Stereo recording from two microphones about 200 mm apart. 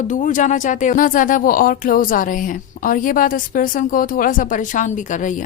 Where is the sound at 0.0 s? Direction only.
40° left (ahead or behind).